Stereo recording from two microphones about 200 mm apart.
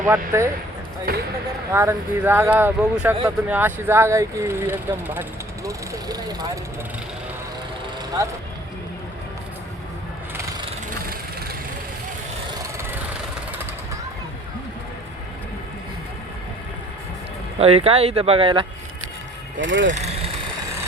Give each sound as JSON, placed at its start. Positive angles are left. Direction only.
{"t": 0.0, "sound": "speech", "side_deg": -15}
{"t": 1.1, "sound": "speech", "side_deg": -50}
{"t": 1.7, "sound": "speech", "side_deg": -15}
{"t": 17.6, "sound": "speech", "side_deg": -30}
{"t": 19.5, "sound": "speech", "side_deg": -65}
{"t": 20.0, "sound": "vehicle", "side_deg": -30}